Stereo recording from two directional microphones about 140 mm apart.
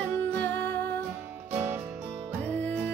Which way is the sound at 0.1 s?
15° left (ahead or behind).